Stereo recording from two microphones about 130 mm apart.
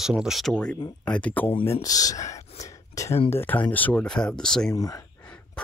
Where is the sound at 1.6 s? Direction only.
25° left (ahead or behind).